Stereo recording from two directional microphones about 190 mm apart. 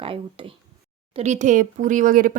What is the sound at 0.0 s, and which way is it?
Speech, 30° right (ahead or behind).